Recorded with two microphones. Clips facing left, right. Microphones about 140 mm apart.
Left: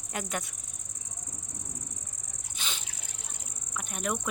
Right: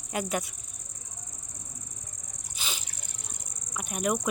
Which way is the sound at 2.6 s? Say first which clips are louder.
Right 1 dB; 5° right (ahead or behind).